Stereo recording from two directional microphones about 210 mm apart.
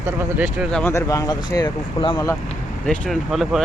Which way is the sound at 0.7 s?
5° left (ahead or behind).